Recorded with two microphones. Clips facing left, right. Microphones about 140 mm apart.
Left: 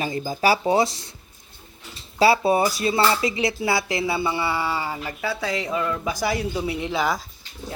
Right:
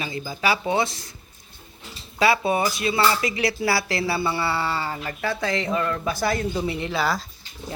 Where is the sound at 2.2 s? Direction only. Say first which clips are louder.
Left 3 dB; 30° left (ahead or behind).